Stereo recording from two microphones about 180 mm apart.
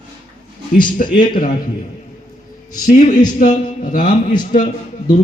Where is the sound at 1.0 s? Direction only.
45° left (ahead or behind).